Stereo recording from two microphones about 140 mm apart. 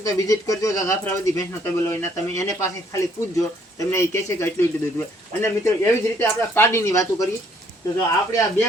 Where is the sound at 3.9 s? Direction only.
20° left (ahead or behind).